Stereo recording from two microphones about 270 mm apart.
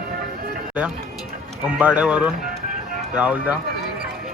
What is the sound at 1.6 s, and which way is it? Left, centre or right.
Speech, centre.